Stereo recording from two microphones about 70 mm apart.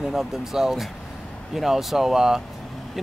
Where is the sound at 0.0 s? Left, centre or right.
Centre.